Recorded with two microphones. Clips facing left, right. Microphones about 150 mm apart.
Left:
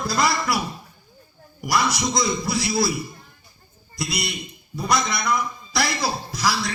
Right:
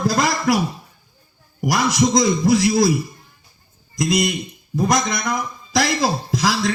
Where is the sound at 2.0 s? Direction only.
45° right (ahead or behind).